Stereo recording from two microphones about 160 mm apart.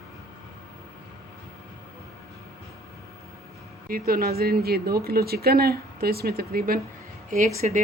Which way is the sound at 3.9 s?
65° right (ahead or behind).